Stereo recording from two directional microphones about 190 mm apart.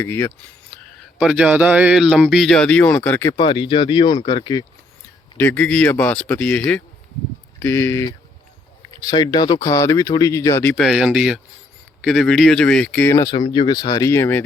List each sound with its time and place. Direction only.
0.0 s a sound: 10° left (ahead or behind)
1.2 s speech: 5° right (ahead or behind); by 3.3 s 10° left (ahead or behind)
3.3 s speech: 25° left (ahead or behind)
5.4 s speech: 10° left (ahead or behind)